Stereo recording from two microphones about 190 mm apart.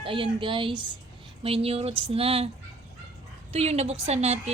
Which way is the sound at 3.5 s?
35° right (ahead or behind).